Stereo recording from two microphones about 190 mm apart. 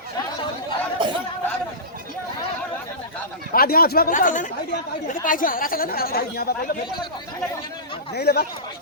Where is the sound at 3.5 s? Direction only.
50° left (ahead or behind).